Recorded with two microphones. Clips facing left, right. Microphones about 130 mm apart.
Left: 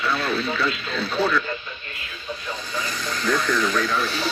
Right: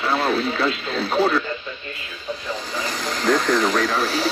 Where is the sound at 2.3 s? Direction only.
90° right.